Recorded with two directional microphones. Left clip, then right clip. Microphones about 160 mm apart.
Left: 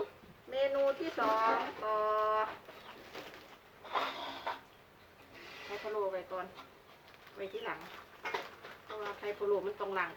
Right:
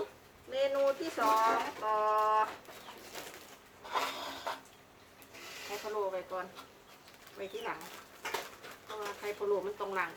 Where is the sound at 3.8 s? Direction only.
20° right (ahead or behind).